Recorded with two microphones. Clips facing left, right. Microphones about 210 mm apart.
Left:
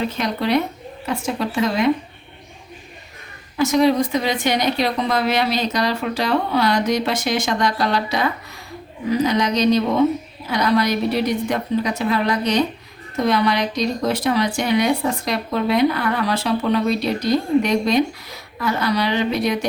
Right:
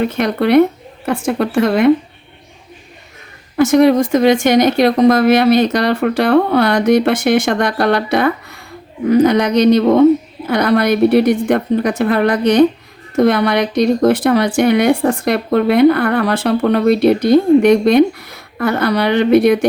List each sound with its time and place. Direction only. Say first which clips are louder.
0.0 s speech: right 7 dB; 60° right (ahead or behind)
3.6 s speech: right 6 dB; 55° right (ahead or behind)